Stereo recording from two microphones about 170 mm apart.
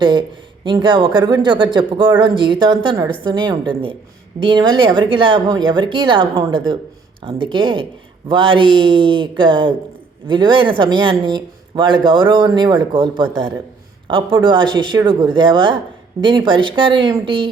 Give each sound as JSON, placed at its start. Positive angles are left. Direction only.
{"t": 0.0, "sound": "a woman's voice", "side_deg": -30}